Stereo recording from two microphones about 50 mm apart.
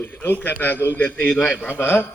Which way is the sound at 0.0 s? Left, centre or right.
Left.